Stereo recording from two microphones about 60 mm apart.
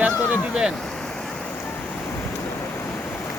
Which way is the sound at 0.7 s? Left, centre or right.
Centre.